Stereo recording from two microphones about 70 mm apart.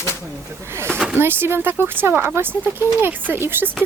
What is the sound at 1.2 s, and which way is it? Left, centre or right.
Speech, right.